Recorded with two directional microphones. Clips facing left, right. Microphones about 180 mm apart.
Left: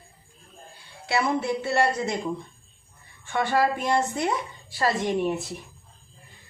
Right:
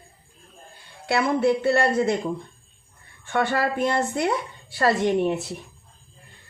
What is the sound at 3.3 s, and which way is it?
A woman's voice, 60° right (ahead or behind).